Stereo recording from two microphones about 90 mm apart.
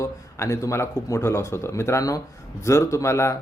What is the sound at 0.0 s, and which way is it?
Speech, 30° left (ahead or behind).